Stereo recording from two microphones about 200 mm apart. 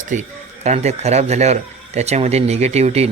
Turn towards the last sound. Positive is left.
turn(degrees=-30)  # may be behind; listen again after turning